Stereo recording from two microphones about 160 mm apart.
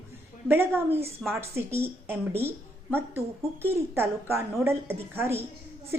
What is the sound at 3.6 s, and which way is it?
A woman's voice, 15° right (ahead or behind).